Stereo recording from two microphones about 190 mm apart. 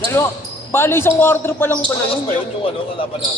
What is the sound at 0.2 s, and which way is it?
A man's voice, 10° left (ahead or behind).